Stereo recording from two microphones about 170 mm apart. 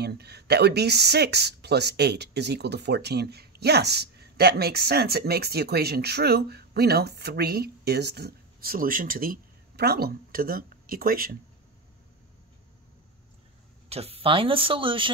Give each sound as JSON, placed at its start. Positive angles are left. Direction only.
{"t": 0.0, "sound": "speech", "side_deg": -70}
{"t": 13.8, "sound": "speech", "side_deg": -35}